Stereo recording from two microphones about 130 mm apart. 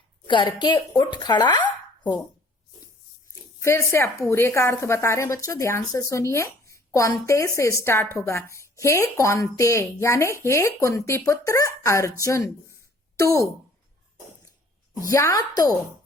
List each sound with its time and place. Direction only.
0.3 s a woman's voice: 40° left (ahead or behind)
3.6 s a woman's voice: 20° left (ahead or behind)
15.0 s a woman's voice: 25° left (ahead or behind)